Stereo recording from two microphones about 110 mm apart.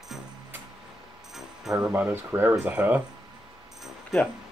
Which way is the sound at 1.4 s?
5° right (ahead or behind).